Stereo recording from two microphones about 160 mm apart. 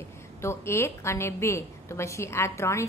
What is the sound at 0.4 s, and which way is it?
A woman's voice, 15° left (ahead or behind).